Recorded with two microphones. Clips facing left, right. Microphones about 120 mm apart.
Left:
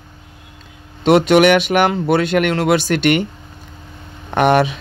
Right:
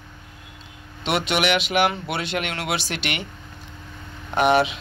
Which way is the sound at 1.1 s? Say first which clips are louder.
Left 11 dB; 45° left (ahead or behind).